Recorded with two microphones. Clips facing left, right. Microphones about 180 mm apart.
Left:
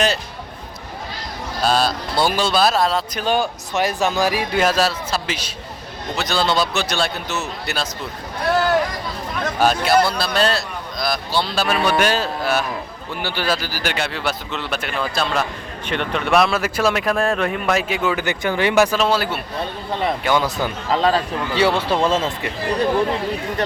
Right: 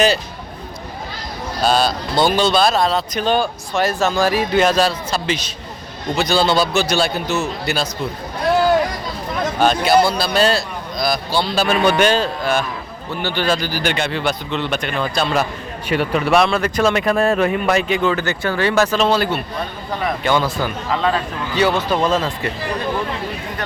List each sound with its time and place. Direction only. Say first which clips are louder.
1.6 s speech: right 2 dB; centre (ahead or behind)
9.6 s speech: right 2 dB; 5° left (ahead or behind)
20.9 s speech: left 3 dB; 35° left (ahead or behind)